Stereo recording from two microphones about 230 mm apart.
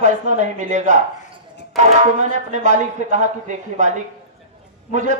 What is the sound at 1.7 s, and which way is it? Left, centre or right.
Speech, centre.